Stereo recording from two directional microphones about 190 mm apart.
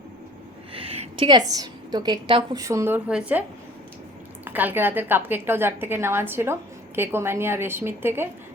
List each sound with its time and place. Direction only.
0.7 s a woman's voice: 30° right (ahead or behind); by 3.4 s 5° right (ahead or behind)
4.4 s a woman's voice: 10° right (ahead or behind)